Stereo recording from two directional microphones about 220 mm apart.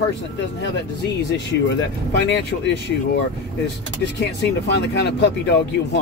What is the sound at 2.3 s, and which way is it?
Speech, 50° left (ahead or behind).